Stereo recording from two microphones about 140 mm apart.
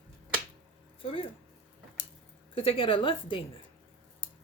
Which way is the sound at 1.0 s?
45° left (ahead or behind).